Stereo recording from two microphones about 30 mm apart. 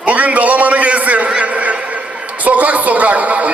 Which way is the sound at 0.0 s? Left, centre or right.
Right.